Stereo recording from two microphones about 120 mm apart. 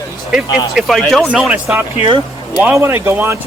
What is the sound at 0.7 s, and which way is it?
Speech, centre (ahead or behind).